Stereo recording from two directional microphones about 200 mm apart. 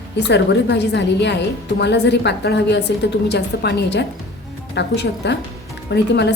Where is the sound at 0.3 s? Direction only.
60° left (ahead or behind).